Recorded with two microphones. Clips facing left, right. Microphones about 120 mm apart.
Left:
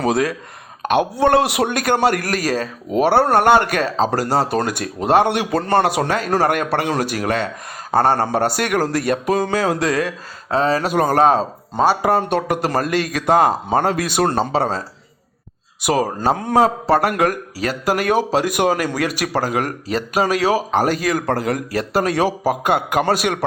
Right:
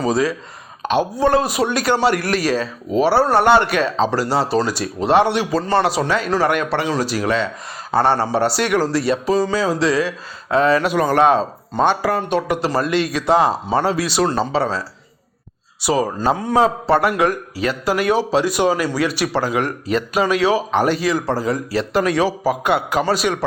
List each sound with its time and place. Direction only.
0.0 s a man's voice: 60° left (ahead or behind)
10.5 s a man's voice: 35° left (ahead or behind)
15.9 s a man's voice: 50° left (ahead or behind)